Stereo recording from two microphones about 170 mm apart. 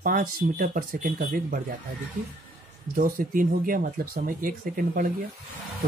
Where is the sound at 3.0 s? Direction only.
55° right (ahead or behind).